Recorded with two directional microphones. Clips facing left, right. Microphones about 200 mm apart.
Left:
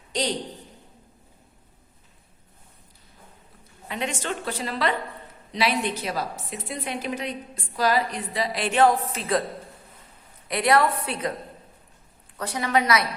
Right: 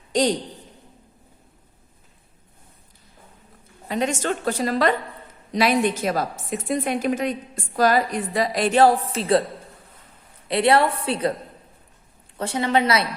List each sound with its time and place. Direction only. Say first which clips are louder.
0.1 s a man's voice: right 7 dB; 45° right (ahead or behind)
3.8 s a woman's voice: right 6 dB; 40° right (ahead or behind)
10.5 s a woman's voice: right 3 dB; 30° right (ahead or behind)
12.4 s a woman's voice: right 3 dB; 25° right (ahead or behind)